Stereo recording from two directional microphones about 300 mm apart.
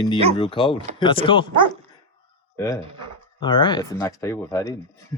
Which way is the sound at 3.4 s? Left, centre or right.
Centre.